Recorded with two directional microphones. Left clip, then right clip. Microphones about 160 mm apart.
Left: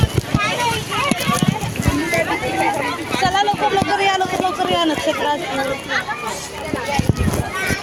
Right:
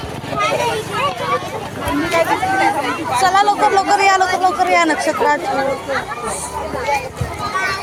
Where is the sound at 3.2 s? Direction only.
10° left (ahead or behind).